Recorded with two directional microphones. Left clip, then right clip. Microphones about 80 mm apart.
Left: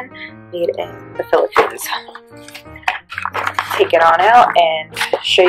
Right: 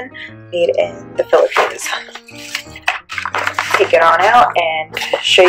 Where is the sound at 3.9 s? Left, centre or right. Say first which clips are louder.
Left 1 dB; left.